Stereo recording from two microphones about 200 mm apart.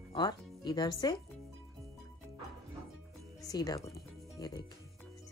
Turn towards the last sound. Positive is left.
turn(degrees=20)  # may be behind; listen again after turning